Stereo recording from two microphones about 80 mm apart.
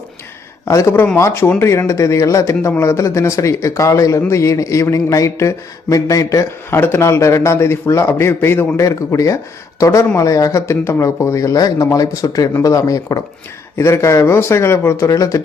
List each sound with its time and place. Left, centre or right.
0.7 s speech: left
6.7 s speech: left
13.7 s speech: left